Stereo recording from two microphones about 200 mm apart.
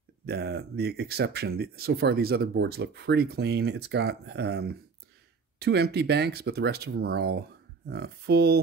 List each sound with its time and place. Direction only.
0.2 s speech: 50° right (ahead or behind)